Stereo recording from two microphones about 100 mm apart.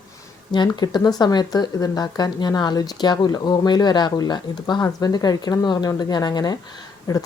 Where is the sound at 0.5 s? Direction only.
45° left (ahead or behind).